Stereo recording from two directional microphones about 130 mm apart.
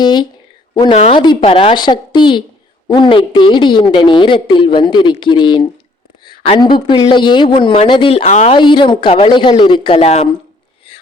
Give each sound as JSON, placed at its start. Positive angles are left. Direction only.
{"t": 0.0, "sound": "a woman's voice", "side_deg": 35}
{"t": 0.9, "sound": "a woman's voice", "side_deg": 50}
{"t": 1.2, "sound": "a woman's voice", "side_deg": 35}
{"t": 1.5, "sound": "a woman's voice", "side_deg": 50}
{"t": 6.2, "sound": "a sound", "side_deg": 45}
{"t": 6.6, "sound": "a woman's voice", "side_deg": 35}